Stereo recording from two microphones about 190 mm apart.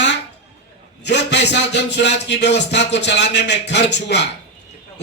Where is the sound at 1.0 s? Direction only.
65° left (ahead or behind).